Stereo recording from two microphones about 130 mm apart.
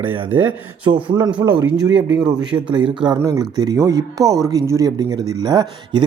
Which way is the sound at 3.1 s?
25° right (ahead or behind).